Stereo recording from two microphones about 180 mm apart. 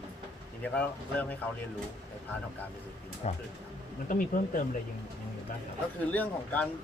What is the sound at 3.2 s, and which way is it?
Speech, 35° left (ahead or behind).